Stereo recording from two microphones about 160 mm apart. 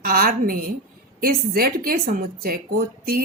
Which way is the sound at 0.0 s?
65° right (ahead or behind).